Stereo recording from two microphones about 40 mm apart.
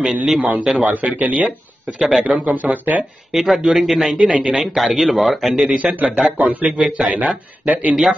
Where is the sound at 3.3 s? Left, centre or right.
Centre.